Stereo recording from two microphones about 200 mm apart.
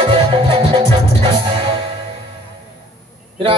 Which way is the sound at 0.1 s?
25° right (ahead or behind).